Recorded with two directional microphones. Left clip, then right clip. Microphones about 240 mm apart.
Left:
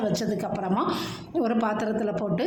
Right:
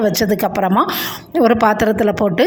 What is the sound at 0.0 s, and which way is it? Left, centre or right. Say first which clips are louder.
A woman's voice: right 12 dB; right.